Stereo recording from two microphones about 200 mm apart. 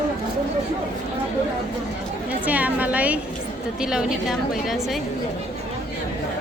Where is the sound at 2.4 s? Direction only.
5° right (ahead or behind).